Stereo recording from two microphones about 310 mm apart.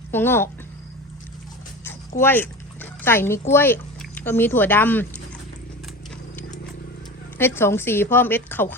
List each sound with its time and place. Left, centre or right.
0.1 s a woman's voice: centre
2.2 s a woman's voice: centre
7.3 s a woman's voice: centre